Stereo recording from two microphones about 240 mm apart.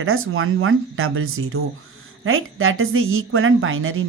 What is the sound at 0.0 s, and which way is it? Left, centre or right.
A woman's voice, right.